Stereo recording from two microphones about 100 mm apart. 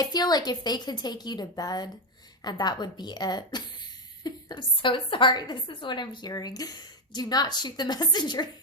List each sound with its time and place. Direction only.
0.0 s a woman's voice: 40° left (ahead or behind)
6.3 s a woman's voice: 40° left (ahead or behind)